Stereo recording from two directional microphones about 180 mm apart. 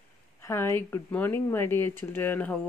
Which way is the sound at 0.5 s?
15° left (ahead or behind).